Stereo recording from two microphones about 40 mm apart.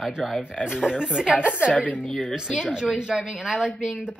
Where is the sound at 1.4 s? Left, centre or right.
Right.